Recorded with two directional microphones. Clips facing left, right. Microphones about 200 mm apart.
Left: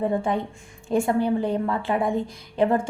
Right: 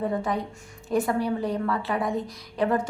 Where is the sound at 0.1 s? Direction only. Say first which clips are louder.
Left 3 dB; 25° left (ahead or behind).